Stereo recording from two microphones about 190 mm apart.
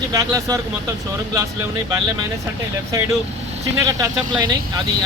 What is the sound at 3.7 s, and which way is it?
Speech, 15° right (ahead or behind).